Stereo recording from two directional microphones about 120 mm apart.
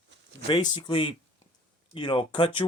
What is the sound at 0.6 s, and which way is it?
Speech, 40° left (ahead or behind).